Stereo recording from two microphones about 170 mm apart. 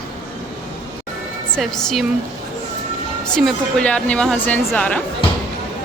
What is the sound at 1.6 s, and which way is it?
Speech, centre (ahead or behind).